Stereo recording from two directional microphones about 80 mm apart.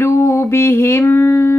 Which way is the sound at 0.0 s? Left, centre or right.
Left.